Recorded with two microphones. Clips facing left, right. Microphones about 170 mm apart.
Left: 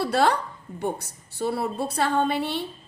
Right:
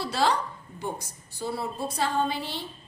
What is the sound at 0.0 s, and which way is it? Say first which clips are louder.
A woman's voice: left 4 dB; 60° left (ahead or behind).